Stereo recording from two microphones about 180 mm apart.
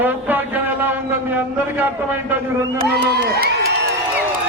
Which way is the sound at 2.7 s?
55° right (ahead or behind).